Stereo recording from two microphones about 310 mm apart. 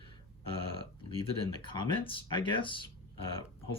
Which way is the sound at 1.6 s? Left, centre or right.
Centre.